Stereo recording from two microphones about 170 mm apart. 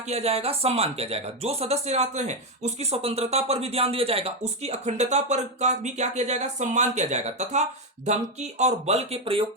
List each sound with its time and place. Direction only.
0.1 s speech: 40° right (ahead or behind)